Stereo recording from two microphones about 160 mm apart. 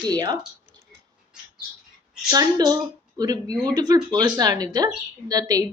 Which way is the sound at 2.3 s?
25° right (ahead or behind).